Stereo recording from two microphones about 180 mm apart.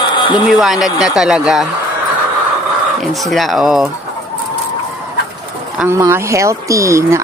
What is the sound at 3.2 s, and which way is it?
Speech, centre (ahead or behind).